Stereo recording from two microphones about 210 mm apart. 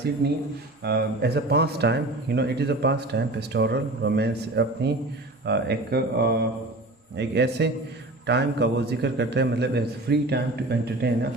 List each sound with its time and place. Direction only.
0.2 s speech: 50° right (ahead or behind)